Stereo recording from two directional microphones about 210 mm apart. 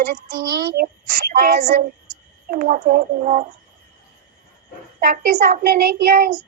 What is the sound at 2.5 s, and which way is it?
Speech, 40° right (ahead or behind).